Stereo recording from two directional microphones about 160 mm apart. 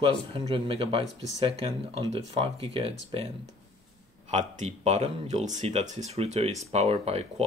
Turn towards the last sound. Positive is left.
turn(degrees=-40)  # may be behind; listen again after turning